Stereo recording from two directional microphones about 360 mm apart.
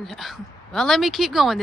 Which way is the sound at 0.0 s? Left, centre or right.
Centre.